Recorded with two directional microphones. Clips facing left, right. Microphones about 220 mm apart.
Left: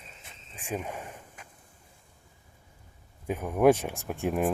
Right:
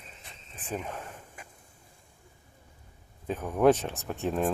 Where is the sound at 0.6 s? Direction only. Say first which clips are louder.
Left 1 dB; 10° left (ahead or behind).